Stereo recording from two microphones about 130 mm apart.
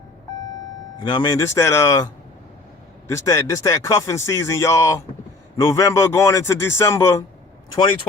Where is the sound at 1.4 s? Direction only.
20° left (ahead or behind).